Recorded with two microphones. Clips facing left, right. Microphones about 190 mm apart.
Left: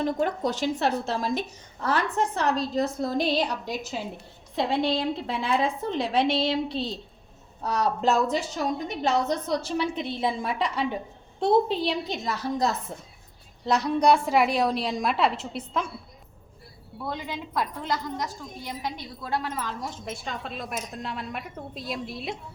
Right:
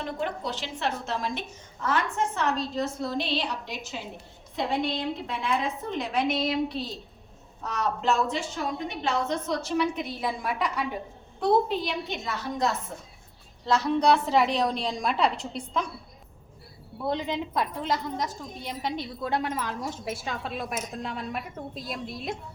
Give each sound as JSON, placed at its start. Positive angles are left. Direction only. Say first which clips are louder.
{"t": 0.0, "sound": "a woman's voice", "louder": "left 6 dB", "side_deg": 40}
{"t": 13.7, "sound": "a woman's voice", "louder": "left 1 dB", "side_deg": 15}
{"t": 17.1, "sound": "a woman's voice", "louder": "right 5 dB", "side_deg": -25}
{"t": 20.2, "sound": "a woman's voice", "louder": "right 2 dB", "side_deg": 0}